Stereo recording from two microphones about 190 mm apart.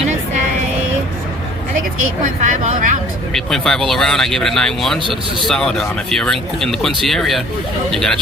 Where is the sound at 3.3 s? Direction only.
Centre (ahead or behind).